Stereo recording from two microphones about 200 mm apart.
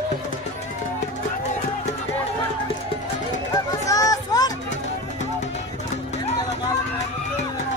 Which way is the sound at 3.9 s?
20° left (ahead or behind).